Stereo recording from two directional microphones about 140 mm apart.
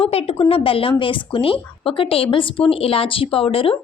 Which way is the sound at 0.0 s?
45° left (ahead or behind).